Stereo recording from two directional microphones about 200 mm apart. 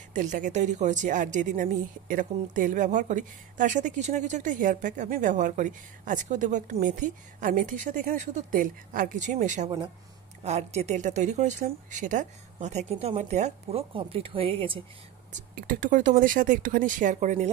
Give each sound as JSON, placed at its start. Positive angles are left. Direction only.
{"t": 0.1, "sound": "a woman's voice", "side_deg": -40}
{"t": 15.5, "sound": "a woman's voice", "side_deg": -45}